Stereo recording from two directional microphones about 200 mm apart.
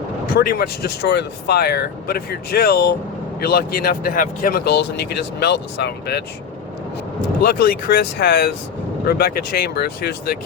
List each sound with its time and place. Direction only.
0.3 s speech: 50° left (ahead or behind)
7.4 s speech: 50° left (ahead or behind)